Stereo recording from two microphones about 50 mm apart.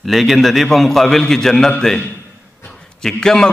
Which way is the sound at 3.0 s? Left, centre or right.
Centre.